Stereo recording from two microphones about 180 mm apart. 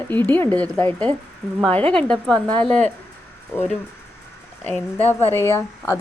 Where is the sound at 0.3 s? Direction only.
10° left (ahead or behind).